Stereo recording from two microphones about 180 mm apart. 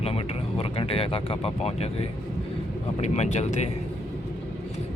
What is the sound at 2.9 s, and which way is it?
Speech, 35° left (ahead or behind).